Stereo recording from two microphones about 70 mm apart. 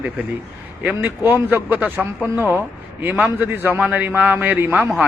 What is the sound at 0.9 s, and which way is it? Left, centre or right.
A man's voice, right.